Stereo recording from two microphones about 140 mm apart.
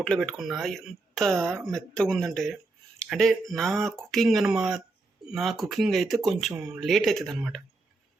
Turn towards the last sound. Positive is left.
turn(degrees=0)  # may be behind; listen again after turning